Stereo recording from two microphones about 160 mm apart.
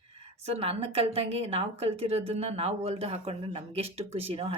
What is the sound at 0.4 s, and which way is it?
A woman's voice, 40° right (ahead or behind).